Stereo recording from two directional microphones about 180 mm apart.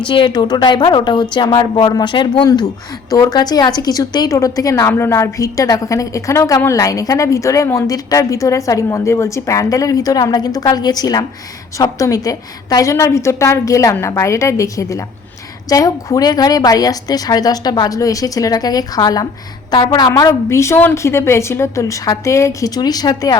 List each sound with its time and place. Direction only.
0.0 s a woman's voice: 25° left (ahead or behind)